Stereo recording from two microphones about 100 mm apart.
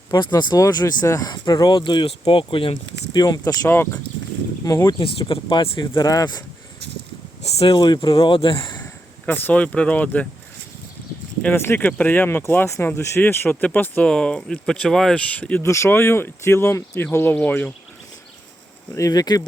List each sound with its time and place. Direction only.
0.1 s speech: 45° left (ahead or behind)
2.0 s speech: 65° left (ahead or behind)
3.2 s speech: 40° left (ahead or behind)
4.9 s speech: 65° left (ahead or behind)
5.2 s speech: 50° left (ahead or behind)
5.8 s speech: 30° left (ahead or behind)
7.7 s speech: 50° left (ahead or behind)
8.8 s speech: 15° left (ahead or behind)
11.4 s speech: 25° left (ahead or behind)
15.6 s speech: 30° left (ahead or behind)
18.9 s speech: 35° left (ahead or behind)